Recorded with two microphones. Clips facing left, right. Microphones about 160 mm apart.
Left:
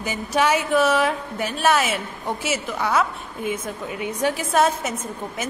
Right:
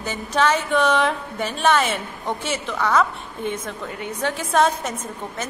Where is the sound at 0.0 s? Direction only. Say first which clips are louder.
Even; 10° left (ahead or behind).